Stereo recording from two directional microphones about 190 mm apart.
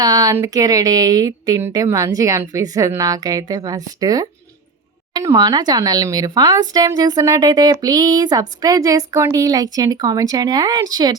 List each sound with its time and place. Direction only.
0.0 s speech: 20° right (ahead or behind)